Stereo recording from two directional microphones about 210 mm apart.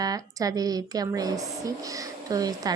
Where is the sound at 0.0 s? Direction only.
15° right (ahead or behind).